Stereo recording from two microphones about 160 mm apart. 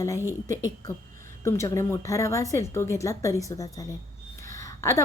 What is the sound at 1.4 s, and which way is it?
A woman's voice, 15° left (ahead or behind).